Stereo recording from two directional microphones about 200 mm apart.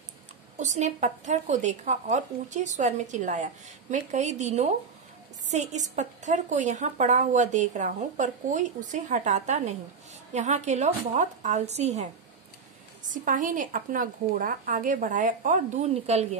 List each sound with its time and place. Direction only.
0.6 s speech: 35° right (ahead or behind)